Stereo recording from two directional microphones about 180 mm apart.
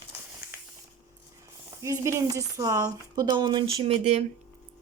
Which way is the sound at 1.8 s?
15° right (ahead or behind).